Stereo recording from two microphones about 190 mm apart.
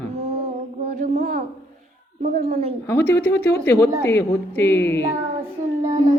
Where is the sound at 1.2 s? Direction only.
50° right (ahead or behind).